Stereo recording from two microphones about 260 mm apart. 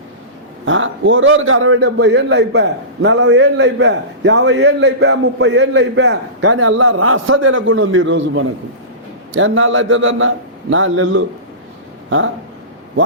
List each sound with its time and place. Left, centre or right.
0.6 s a man's voice: right